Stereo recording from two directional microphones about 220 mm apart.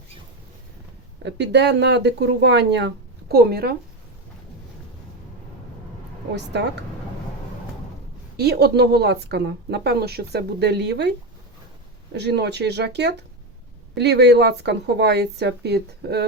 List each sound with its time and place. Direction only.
1.2 s speech: 50° right (ahead or behind)
6.3 s speech: 50° right (ahead or behind)
8.4 s speech: 45° right (ahead or behind)
12.1 s speech: 50° right (ahead or behind)